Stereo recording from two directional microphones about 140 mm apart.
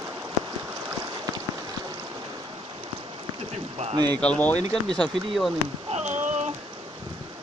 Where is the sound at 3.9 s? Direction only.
30° right (ahead or behind).